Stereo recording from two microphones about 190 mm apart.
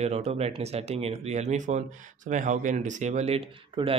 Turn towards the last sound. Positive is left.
turn(degrees=-30)  # may be behind; listen again after turning